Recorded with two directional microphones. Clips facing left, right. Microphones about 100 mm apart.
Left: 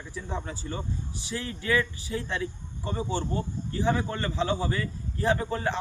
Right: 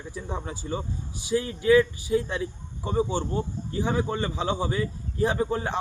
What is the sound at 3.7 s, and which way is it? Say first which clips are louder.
A man's voice: right 1 dB; 15° right (ahead or behind).